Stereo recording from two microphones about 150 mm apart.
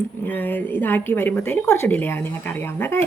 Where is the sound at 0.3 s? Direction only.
10° left (ahead or behind).